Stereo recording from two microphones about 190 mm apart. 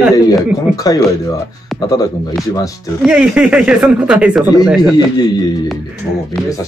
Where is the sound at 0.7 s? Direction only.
20° left (ahead or behind).